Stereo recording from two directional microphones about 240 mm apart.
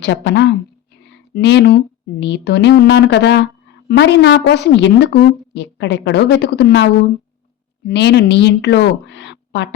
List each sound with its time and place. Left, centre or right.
0.0 s a woman's voice: left
1.0 s a sound: left
2.2 s a woman's voice: left
7.9 s a woman's voice: left